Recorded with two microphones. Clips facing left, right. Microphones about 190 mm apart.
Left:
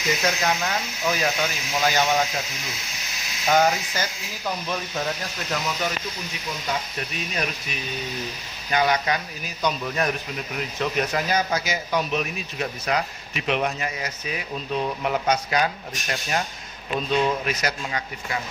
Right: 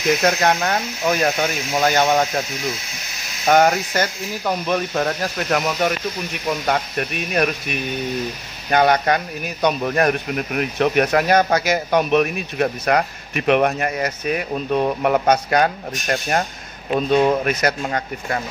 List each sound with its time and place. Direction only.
0.2 s speech: 55° right (ahead or behind)
3.4 s a man's voice: 60° right (ahead or behind)